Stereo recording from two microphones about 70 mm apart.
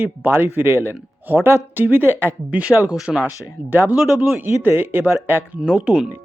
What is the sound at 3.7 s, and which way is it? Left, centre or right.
Speech, right.